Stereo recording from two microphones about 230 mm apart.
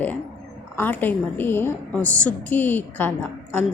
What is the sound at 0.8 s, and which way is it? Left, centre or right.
A woman's voice, centre.